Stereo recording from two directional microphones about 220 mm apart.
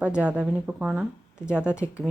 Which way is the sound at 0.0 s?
5° right (ahead or behind).